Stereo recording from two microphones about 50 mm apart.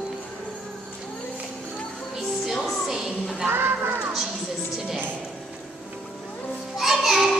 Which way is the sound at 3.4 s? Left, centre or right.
Right.